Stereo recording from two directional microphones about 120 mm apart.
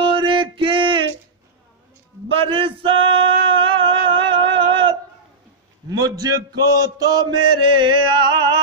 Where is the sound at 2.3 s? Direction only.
45° right (ahead or behind).